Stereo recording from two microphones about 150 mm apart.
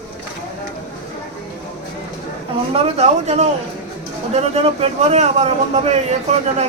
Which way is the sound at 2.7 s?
45° right (ahead or behind).